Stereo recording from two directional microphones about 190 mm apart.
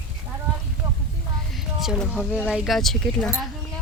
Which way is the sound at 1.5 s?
Centre (ahead or behind).